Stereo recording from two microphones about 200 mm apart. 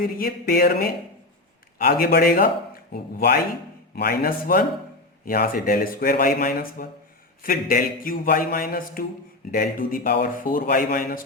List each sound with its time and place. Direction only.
0.0 s a man's voice: 45° left (ahead or behind)